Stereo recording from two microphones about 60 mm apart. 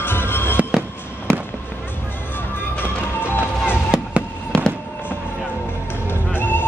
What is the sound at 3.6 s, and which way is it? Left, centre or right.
Chop, centre.